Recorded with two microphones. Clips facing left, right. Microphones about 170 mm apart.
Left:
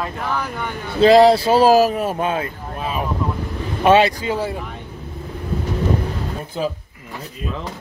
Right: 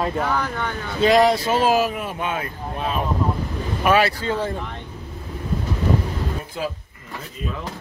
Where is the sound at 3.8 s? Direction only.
25° left (ahead or behind); by 4.8 s 5° left (ahead or behind).